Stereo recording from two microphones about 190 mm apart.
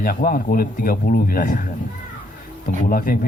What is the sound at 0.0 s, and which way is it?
Speech, 50° left (ahead or behind).